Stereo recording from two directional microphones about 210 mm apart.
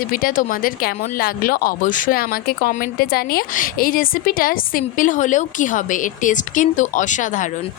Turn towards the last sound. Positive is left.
turn(degrees=35)  # may be behind; listen again after turning